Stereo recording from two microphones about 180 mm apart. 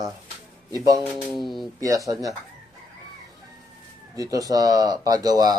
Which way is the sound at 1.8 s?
20° right (ahead or behind).